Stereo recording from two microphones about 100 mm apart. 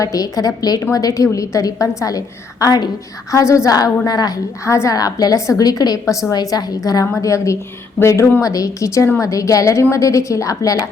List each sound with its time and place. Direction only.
0.0 s a woman's voice: 35° left (ahead or behind)